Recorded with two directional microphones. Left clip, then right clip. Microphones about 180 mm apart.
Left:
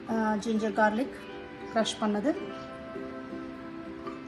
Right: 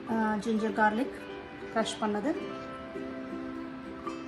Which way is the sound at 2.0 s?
35° left (ahead or behind).